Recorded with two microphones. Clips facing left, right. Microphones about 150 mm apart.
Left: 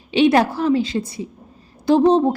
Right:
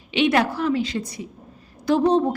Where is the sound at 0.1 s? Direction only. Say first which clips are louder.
Left 5 dB; 35° left (ahead or behind).